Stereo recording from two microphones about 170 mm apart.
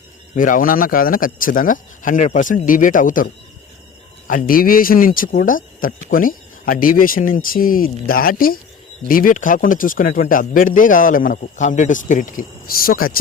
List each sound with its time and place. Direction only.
0.3 s speech: 50° left (ahead or behind)
4.3 s speech: 55° left (ahead or behind)